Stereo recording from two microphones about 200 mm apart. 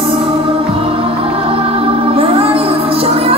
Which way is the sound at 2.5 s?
30° right (ahead or behind).